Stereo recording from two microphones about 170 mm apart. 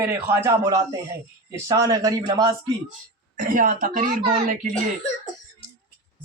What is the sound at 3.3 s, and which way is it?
Speech, 55° right (ahead or behind).